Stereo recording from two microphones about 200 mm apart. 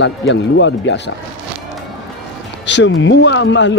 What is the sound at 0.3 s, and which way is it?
Speech, 65° left (ahead or behind).